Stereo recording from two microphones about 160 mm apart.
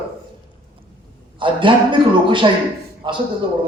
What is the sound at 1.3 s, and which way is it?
A man's voice, 30° right (ahead or behind).